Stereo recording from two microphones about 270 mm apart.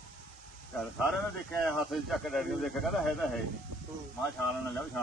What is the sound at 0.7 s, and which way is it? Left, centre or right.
Speech, centre.